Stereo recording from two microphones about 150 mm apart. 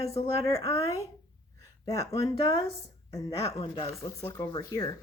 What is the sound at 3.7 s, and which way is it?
Speech, 35° left (ahead or behind).